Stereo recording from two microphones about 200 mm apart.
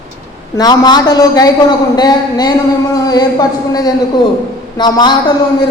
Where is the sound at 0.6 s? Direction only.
20° left (ahead or behind).